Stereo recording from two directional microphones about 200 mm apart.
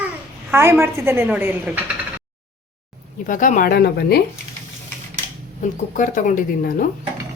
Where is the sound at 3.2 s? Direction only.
40° left (ahead or behind).